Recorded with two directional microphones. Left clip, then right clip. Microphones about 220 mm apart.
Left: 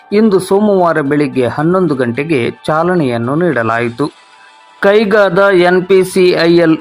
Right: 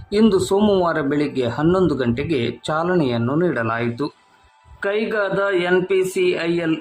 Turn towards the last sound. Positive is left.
turn(degrees=30)  # may be behind; listen again after turning